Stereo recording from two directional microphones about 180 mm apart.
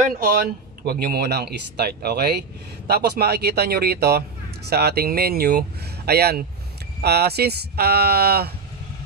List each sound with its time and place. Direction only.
0.8 s speech: 60° right (ahead or behind)